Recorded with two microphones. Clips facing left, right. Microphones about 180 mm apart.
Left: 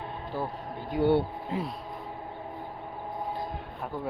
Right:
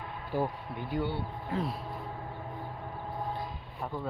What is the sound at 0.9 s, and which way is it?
Speech, 65° left (ahead or behind).